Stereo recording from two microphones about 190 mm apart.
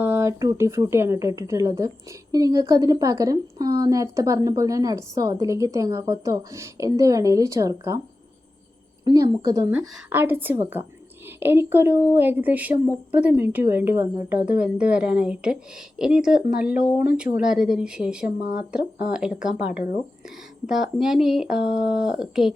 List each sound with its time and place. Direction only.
0.0 s a woman's voice: 15° right (ahead or behind)
9.0 s a woman's voice: 20° right (ahead or behind)
16.8 s speech: 45° left (ahead or behind)
17.2 s speech: 5° right (ahead or behind)
20.7 s speech: 5° right (ahead or behind)